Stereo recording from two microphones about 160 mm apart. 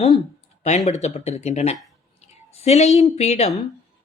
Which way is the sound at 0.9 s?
45° left (ahead or behind).